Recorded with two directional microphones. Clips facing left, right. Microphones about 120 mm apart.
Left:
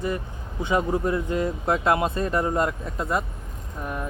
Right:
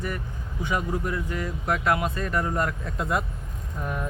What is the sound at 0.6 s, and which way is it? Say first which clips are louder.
Speech: left 5 dB; 25° left (ahead or behind).